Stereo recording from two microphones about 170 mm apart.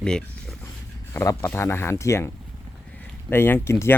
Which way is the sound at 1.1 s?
15° left (ahead or behind).